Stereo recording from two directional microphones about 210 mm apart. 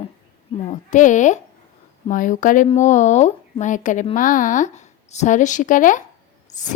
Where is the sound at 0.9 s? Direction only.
35° left (ahead or behind).